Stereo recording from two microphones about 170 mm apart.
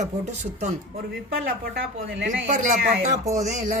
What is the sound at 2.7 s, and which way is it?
Speech, 60° right (ahead or behind).